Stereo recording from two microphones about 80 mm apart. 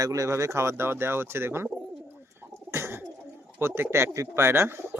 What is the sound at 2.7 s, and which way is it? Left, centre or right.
Bird, right.